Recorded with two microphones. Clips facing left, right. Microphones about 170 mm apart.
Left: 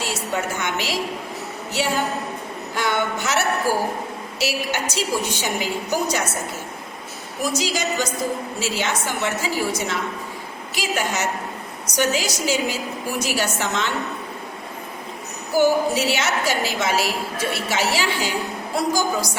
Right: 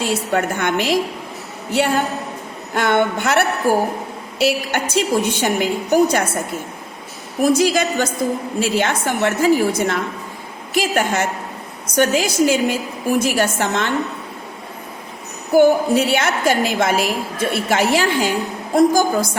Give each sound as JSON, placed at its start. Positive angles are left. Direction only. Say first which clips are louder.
{"t": 0.0, "sound": "a woman's voice", "louder": "right 6 dB", "side_deg": -55}
{"t": 7.4, "sound": "a woman's voice", "louder": "right 8 dB", "side_deg": -55}
{"t": 15.5, "sound": "a woman's voice", "louder": "right 5 dB", "side_deg": -55}